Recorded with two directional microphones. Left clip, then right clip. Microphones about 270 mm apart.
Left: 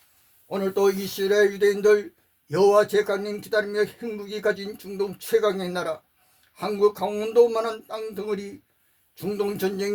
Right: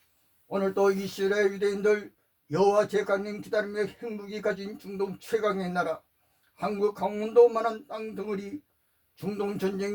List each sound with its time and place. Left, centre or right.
0.6 s speech: left